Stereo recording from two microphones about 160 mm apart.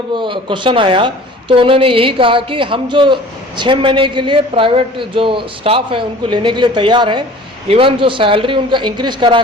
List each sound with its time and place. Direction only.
0.2 s a man's voice: 30° right (ahead or behind)